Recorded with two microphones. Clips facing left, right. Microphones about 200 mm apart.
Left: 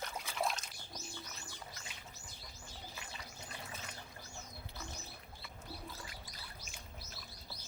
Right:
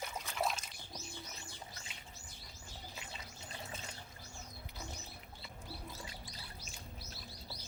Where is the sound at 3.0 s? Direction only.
25° right (ahead or behind).